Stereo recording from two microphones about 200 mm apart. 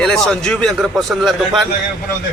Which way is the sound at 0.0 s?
5° left (ahead or behind).